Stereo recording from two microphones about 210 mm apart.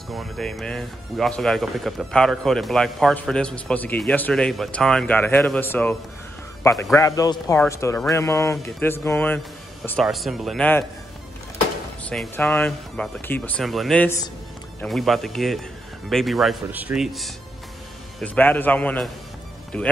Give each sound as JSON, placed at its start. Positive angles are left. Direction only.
{"t": 0.1, "sound": "speech", "side_deg": 0}
{"t": 12.0, "sound": "speech", "side_deg": 5}